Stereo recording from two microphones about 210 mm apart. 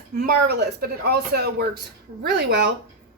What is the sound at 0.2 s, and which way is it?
A woman's voice, 45° right (ahead or behind).